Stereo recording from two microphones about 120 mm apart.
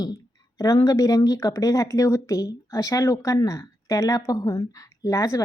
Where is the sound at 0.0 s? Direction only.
30° left (ahead or behind).